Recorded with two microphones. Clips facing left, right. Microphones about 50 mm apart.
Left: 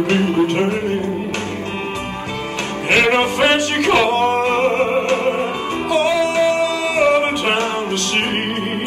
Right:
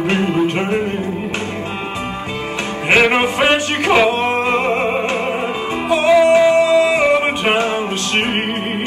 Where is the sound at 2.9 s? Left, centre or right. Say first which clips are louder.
Right 1 dB; centre.